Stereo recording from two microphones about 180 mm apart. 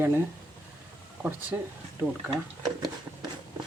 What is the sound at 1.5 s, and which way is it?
Speech, 15° right (ahead or behind).